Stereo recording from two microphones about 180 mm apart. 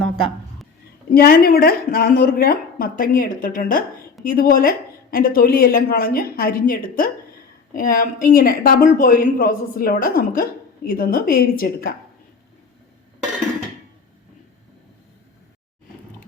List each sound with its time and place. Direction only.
1.1 s a woman's voice: 55° left (ahead or behind)